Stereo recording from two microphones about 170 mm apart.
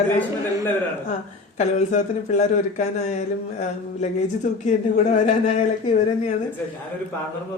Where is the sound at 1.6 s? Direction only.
45° left (ahead or behind).